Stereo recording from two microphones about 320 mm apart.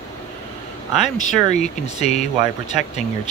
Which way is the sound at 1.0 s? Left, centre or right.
Left.